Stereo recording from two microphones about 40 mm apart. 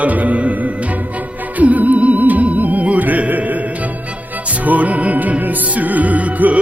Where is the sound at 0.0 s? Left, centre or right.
Right.